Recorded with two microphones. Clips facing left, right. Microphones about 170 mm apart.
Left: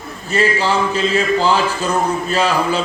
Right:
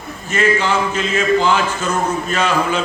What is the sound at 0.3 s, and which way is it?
A man's voice, 35° left (ahead or behind).